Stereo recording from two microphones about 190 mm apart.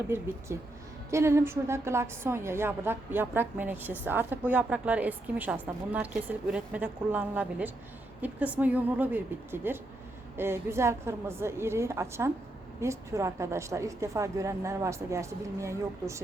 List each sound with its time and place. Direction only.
1.1 s a woman's voice: 15° right (ahead or behind)